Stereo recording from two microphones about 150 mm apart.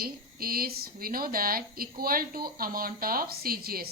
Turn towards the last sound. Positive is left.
turn(degrees=-80)